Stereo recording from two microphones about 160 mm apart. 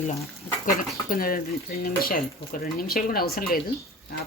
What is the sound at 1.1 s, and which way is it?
Speech, 65° left (ahead or behind).